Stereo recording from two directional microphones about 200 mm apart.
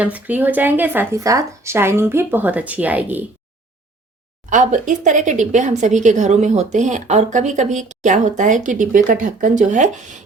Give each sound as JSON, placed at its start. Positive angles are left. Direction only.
{"t": 0.0, "sound": "speech", "side_deg": -10}
{"t": 4.4, "sound": "speech", "side_deg": -40}